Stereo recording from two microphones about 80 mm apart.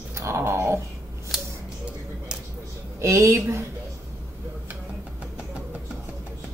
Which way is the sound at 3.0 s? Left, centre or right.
Right.